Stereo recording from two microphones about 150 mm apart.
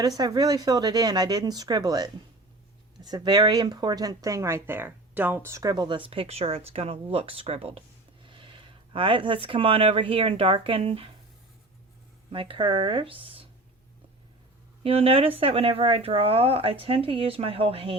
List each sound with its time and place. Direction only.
0.2 s speech: 25° right (ahead or behind)
12.3 s speech: 35° right (ahead or behind)
14.8 s speech: 40° right (ahead or behind)